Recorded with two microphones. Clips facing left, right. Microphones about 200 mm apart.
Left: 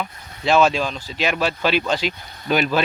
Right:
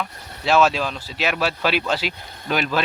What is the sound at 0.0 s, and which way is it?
Speech, 5° right (ahead or behind).